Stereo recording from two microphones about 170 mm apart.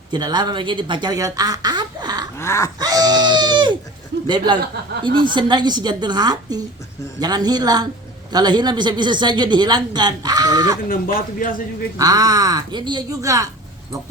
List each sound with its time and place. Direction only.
0.1 s speech: 25° right (ahead or behind)
2.4 s a sound: 15° left (ahead or behind)
2.7 s speech: 20° right (ahead or behind)
4.1 s a sound: 80° right
5.0 s speech: 30° right (ahead or behind)
10.8 s a man's voice: 55° left (ahead or behind)
11.9 s speech: 20° right (ahead or behind)